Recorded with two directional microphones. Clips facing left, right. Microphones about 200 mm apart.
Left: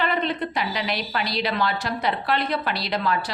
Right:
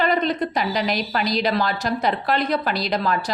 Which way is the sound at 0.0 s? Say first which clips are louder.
Right 4 dB; 40° right (ahead or behind).